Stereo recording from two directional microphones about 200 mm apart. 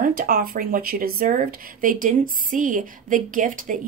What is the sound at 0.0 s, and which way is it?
A woman's voice, 45° right (ahead or behind).